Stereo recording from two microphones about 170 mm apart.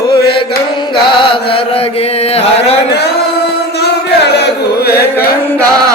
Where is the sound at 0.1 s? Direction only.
30° left (ahead or behind).